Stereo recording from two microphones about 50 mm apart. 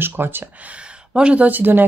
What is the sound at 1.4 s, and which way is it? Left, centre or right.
Speech, right.